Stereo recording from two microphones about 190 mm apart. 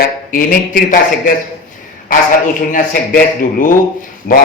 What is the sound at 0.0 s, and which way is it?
A man's voice, 45° left (ahead or behind).